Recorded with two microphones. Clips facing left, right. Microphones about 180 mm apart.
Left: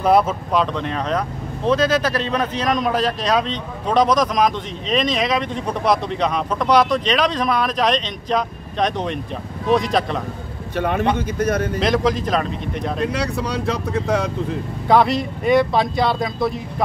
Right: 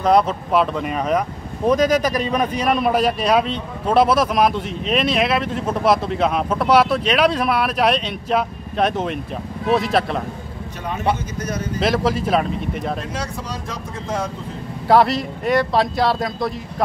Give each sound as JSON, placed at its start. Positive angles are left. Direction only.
{"t": 0.0, "sound": "a man's voice", "side_deg": 5}
{"t": 10.8, "sound": "speech", "side_deg": 65}
{"t": 11.8, "sound": "speech", "side_deg": -5}
{"t": 13.0, "sound": "speech", "side_deg": 65}
{"t": 14.9, "sound": "speech", "side_deg": 0}